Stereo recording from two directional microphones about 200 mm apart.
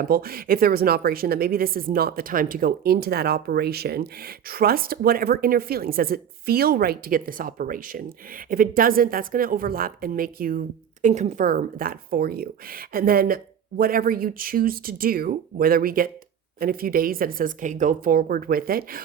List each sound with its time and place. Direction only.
0.0 s a woman's voice: 50° right (ahead or behind)